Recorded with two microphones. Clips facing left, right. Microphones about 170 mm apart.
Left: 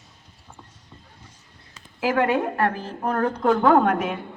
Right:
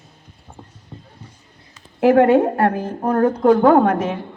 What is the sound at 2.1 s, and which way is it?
A woman's voice, 35° right (ahead or behind).